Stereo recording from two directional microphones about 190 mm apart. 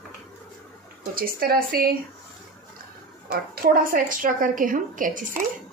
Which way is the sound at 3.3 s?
50° right (ahead or behind).